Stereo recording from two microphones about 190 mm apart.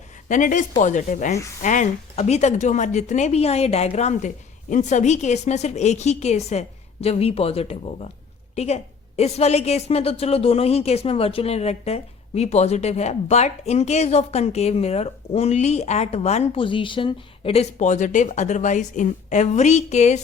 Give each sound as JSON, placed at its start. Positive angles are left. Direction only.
{"t": 0.3, "sound": "a woman's voice", "side_deg": 40}